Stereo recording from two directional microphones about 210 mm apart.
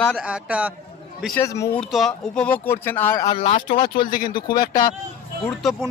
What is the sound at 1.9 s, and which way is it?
Speech, centre (ahead or behind).